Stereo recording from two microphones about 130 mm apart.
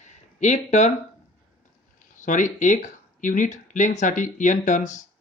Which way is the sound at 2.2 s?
80° left.